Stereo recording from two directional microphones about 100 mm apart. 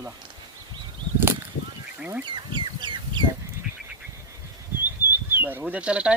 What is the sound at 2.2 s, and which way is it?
Fowl, 50° right (ahead or behind).